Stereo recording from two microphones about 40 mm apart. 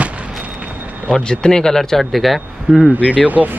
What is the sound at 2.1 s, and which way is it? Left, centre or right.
Speech, centre.